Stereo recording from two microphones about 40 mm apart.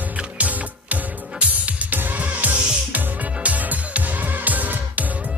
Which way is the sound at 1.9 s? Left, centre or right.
Right.